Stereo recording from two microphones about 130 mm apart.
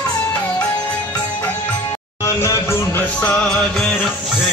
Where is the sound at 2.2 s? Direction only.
25° left (ahead or behind); by 4.1 s 5° left (ahead or behind).